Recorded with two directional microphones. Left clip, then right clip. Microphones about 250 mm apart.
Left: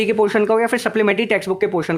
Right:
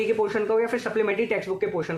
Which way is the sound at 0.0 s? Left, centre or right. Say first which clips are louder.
Left 7 dB; left.